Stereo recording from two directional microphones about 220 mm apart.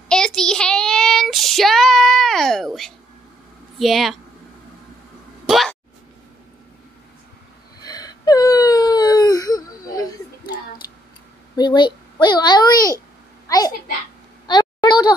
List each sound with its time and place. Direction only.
0.1 s child singing: 5° left (ahead or behind)
3.8 s speech: centre (ahead or behind)
5.5 s a sound: centre (ahead or behind)
7.8 s wail: 15° left (ahead or behind)
10.8 s tick-tock: 15° left (ahead or behind)
11.5 s a sound: 20° left (ahead or behind)